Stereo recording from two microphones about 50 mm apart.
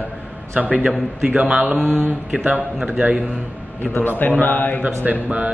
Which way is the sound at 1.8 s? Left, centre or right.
Centre.